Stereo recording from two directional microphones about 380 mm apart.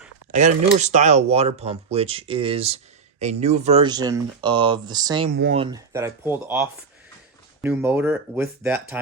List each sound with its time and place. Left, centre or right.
0.3 s speech: centre
5.4 s speech: right
5.7 s speech: centre